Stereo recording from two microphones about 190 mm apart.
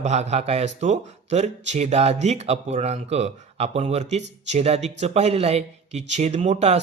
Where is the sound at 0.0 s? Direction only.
35° right (ahead or behind).